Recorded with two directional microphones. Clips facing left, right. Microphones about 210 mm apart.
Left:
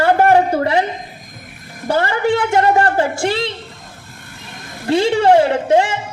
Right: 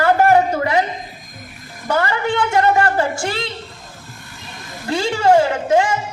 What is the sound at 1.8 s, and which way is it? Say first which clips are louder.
A woman's voice: left 3 dB; 30° left (ahead or behind).